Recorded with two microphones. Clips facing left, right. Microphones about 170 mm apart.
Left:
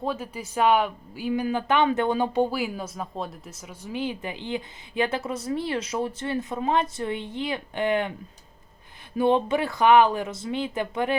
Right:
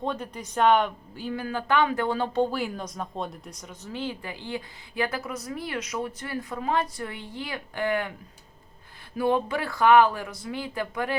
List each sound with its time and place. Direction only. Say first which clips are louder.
0.0 s a woman's voice: left 1 dB; 5° left (ahead or behind); by 8.1 s 20° left (ahead or behind)
9.1 s a woman's voice: left 3 dB; 25° left (ahead or behind)